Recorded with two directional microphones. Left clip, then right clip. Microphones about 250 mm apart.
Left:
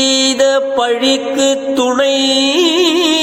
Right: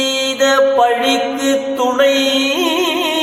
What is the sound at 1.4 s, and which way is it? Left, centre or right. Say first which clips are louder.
Music: left 2 dB; left.